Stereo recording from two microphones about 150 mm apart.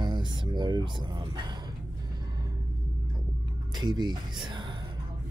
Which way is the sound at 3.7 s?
30° right (ahead or behind).